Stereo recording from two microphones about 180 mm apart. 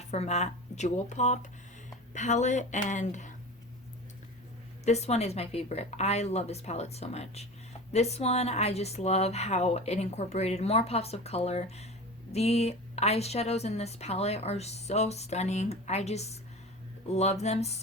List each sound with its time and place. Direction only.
0.1 s a woman's voice: 35° left (ahead or behind)
4.9 s a woman's voice: 35° left (ahead or behind)